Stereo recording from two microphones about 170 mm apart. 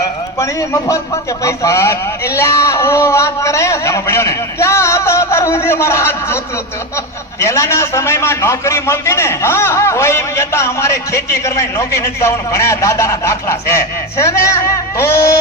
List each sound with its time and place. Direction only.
0.3 s speech: 20° left (ahead or behind)